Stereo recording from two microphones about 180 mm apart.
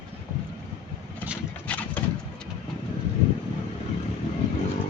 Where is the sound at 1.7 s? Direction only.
10° left (ahead or behind).